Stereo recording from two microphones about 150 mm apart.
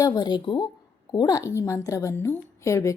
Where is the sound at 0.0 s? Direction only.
25° left (ahead or behind).